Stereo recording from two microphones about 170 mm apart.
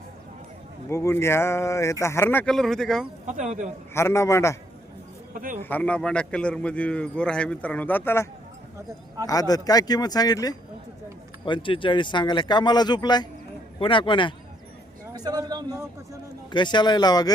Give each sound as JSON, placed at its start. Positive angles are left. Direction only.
{"t": 0.9, "sound": "a man's voice", "side_deg": 15}
{"t": 3.2, "sound": "speech", "side_deg": -50}
{"t": 3.9, "sound": "a man's voice", "side_deg": 15}
{"t": 5.3, "sound": "a man's voice", "side_deg": -55}
{"t": 5.6, "sound": "a man's voice", "side_deg": 10}
{"t": 15.1, "sound": "speech", "side_deg": -25}
{"t": 16.5, "sound": "speech", "side_deg": 25}